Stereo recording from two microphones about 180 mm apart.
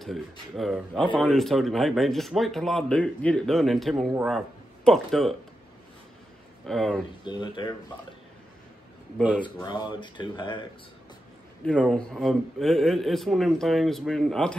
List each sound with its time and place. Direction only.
0.0 s speech: centre (ahead or behind)
6.6 s speech: centre (ahead or behind)
7.2 s speech: 25° left (ahead or behind)
9.4 s speech: 25° left (ahead or behind)
11.6 s speech: 5° left (ahead or behind)